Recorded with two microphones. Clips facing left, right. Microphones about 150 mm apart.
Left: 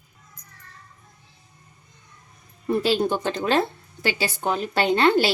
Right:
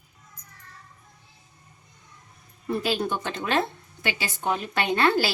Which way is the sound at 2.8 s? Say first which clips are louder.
Left 5 dB; 30° left (ahead or behind).